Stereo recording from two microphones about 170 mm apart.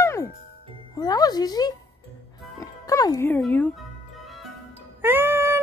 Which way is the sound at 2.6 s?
20° left (ahead or behind).